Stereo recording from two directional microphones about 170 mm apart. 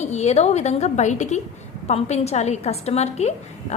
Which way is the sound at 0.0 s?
40° left (ahead or behind).